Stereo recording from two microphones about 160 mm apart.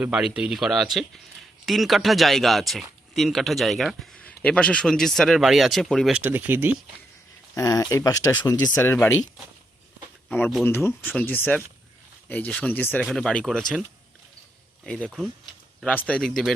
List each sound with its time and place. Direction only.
0.0 s speech: 5° right (ahead or behind)
7.5 s speech: 20° left (ahead or behind)
10.2 s speech: 10° left (ahead or behind)
14.8 s speech: 5° left (ahead or behind)